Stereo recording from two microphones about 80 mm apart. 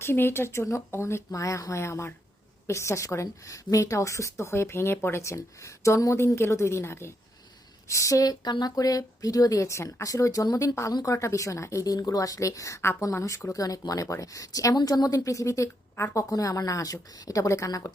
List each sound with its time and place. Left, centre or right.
0.0 s a woman's voice: left